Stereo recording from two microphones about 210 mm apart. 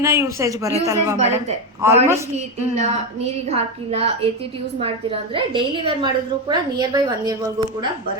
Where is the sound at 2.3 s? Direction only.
30° right (ahead or behind).